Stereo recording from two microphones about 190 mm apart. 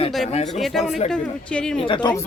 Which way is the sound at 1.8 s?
25° left (ahead or behind).